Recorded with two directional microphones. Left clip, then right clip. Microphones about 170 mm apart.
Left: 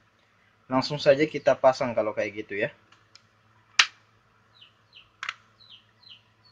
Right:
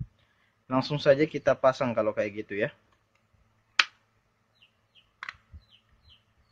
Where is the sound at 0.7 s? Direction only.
15° right (ahead or behind).